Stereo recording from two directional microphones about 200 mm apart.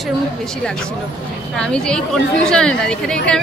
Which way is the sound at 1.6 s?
5° left (ahead or behind).